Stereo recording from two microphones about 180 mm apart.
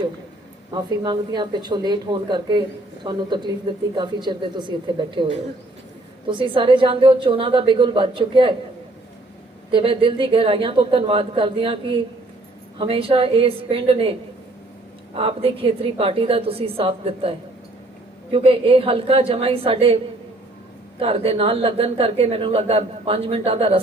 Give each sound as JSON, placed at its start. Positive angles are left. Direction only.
{"t": 0.7, "sound": "speech", "side_deg": -25}
{"t": 9.7, "sound": "speech", "side_deg": -30}
{"t": 21.0, "sound": "speech", "side_deg": -30}